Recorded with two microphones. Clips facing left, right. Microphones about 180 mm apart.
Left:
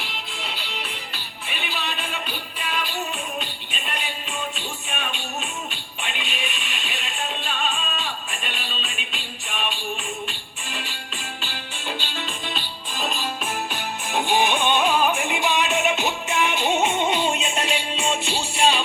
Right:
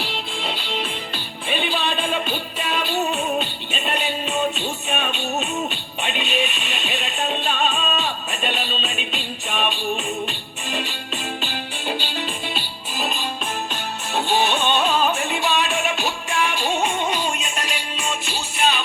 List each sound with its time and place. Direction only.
0.0 s music: 30° right (ahead or behind); by 13.2 s centre (ahead or behind)
14.1 s music: 15° left (ahead or behind); by 18.8 s 30° left (ahead or behind)